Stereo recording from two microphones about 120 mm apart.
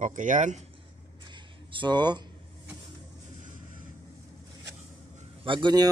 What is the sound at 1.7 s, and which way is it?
Speech, 40° right (ahead or behind).